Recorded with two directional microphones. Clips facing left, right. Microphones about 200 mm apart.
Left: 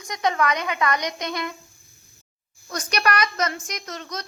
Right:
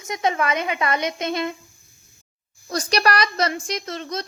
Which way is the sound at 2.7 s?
30° right (ahead or behind).